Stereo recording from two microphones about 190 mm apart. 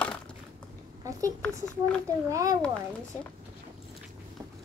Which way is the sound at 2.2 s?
15° right (ahead or behind).